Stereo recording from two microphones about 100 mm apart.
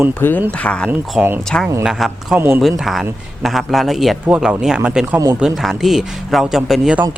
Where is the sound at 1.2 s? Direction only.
5° right (ahead or behind).